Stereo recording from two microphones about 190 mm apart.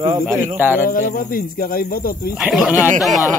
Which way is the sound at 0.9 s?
45° left (ahead or behind).